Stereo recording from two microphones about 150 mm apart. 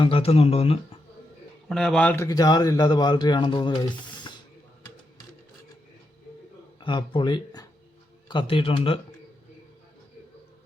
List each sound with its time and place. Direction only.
0.0 s speech: 40° left (ahead or behind)
1.7 s speech: centre (ahead or behind)
2.2 s speech: 25° left (ahead or behind)
6.7 s speech: 30° left (ahead or behind)